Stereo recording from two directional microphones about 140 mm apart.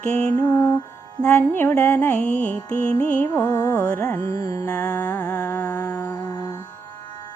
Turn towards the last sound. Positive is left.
turn(degrees=30)  # may be behind; listen again after turning